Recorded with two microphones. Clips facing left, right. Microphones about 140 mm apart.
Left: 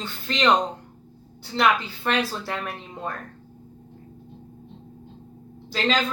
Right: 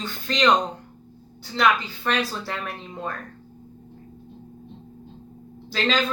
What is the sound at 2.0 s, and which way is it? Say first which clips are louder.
Speech: left 1 dB; 15° left (ahead or behind).